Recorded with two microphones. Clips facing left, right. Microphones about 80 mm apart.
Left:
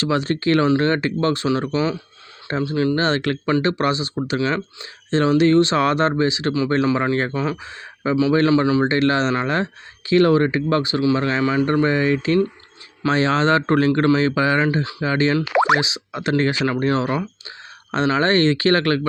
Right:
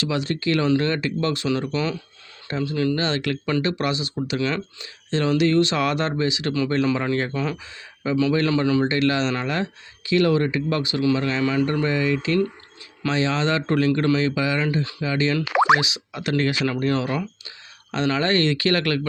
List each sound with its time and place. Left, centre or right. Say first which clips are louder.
0.0 s speech: left 4 dB; left
2.5 s speech: left 3 dB; left
2.7 s a man's voice: left 3 dB; left
3.0 s a man's voice: left 4 dB; left
8.8 s speech: left 3 dB; left
15.8 s speech: left 3 dB; left